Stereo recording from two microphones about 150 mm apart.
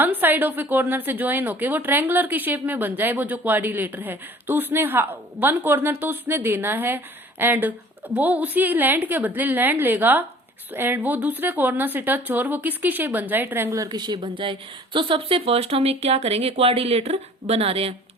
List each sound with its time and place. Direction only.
0.0 s a woman's voice: 15° right (ahead or behind); by 17.9 s 40° right (ahead or behind)